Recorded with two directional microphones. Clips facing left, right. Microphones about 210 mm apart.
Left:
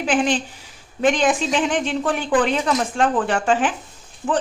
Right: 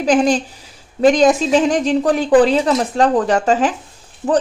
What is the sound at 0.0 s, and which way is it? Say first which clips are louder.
A woman's voice: right 6 dB; 40° right (ahead or behind).